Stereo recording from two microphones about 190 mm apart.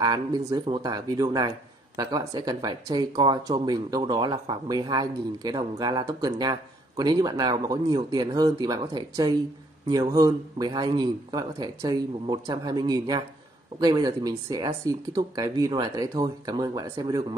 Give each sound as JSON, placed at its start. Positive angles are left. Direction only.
{"t": 0.0, "sound": "speech", "side_deg": -20}